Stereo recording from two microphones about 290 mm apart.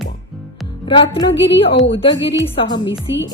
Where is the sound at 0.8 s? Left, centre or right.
Centre.